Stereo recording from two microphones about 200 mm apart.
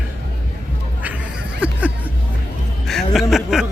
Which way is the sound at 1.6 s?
5° right (ahead or behind).